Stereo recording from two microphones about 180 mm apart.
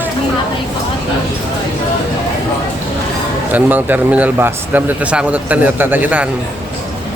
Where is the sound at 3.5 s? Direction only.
10° right (ahead or behind).